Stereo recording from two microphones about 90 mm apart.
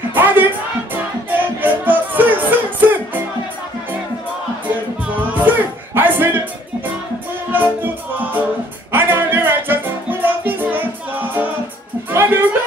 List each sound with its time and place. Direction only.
0.1 s music: 20° right (ahead or behind)
1.6 s music: 20° right (ahead or behind)
5.3 s music: 20° right (ahead or behind)
7.5 s music: 20° right (ahead or behind)